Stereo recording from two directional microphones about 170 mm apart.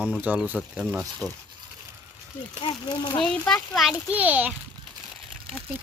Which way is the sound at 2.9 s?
25° left (ahead or behind).